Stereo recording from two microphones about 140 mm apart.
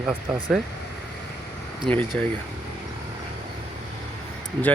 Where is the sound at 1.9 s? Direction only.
5° left (ahead or behind).